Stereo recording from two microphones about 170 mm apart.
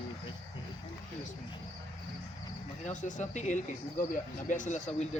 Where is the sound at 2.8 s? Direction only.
45° left (ahead or behind).